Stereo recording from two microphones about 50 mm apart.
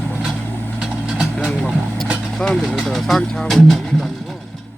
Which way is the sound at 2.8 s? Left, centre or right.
Centre.